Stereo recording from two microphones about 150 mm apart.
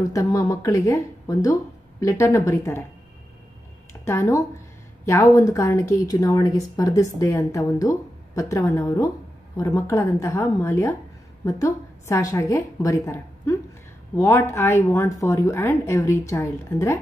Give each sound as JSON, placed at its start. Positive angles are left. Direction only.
{"t": 0.0, "sound": "a woman's voice", "side_deg": 20}
{"t": 4.0, "sound": "a woman's voice", "side_deg": 20}